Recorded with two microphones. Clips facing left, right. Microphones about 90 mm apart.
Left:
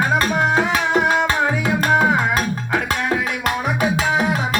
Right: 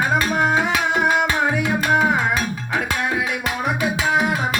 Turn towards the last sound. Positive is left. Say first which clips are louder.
# left 1 dB
turn(degrees=0)  # may be behind; listen again after turning